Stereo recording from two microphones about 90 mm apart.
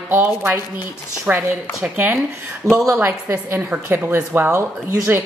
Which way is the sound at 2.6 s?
40° right (ahead or behind).